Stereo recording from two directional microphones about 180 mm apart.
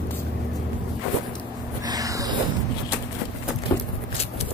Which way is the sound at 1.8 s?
20° right (ahead or behind).